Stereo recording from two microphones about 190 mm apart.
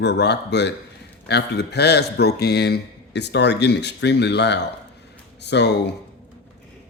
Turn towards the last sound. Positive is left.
turn(degrees=65)  # may be behind; listen again after turning